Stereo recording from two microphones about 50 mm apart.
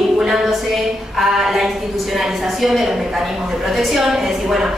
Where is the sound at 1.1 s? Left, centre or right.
Centre.